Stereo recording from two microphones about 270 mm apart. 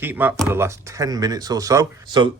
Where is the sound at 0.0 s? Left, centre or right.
Centre.